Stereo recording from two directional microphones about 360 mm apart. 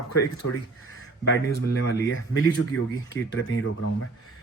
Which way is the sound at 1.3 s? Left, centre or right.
Left.